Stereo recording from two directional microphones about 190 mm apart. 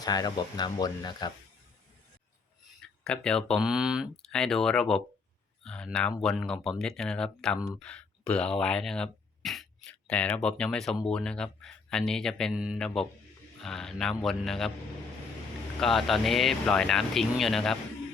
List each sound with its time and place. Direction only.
0.0 s speech: 20° left (ahead or behind)
2.8 s speech: 5° left (ahead or behind)
15.8 s speech: centre (ahead or behind)